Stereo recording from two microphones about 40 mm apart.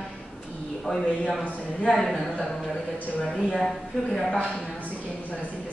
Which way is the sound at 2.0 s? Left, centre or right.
Centre.